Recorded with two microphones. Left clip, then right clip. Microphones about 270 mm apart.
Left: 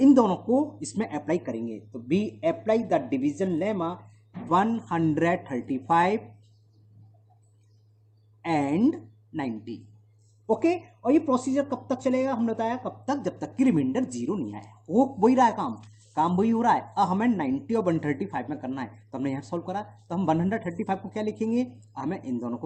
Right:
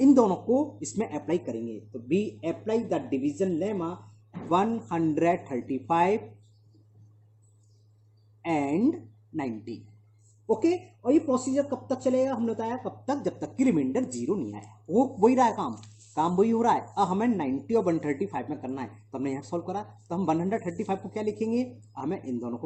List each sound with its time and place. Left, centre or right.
0.0 s a man's voice: left
8.4 s a woman's voice: left